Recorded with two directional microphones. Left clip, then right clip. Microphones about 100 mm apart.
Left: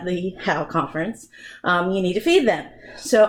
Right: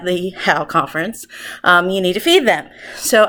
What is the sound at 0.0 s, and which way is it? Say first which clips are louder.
Speech: right 7 dB; 20° right (ahead or behind).